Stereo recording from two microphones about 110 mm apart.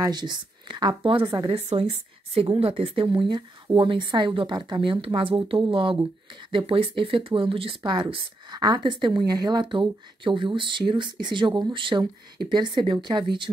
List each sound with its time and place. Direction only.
0.0 s speech: 40° right (ahead or behind)
1.5 s a woman's voice: 70° right (ahead or behind); by 4.9 s 40° right (ahead or behind)
5.0 s speech: 50° right (ahead or behind)